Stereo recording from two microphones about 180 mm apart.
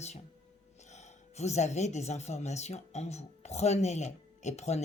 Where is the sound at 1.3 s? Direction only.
40° left (ahead or behind).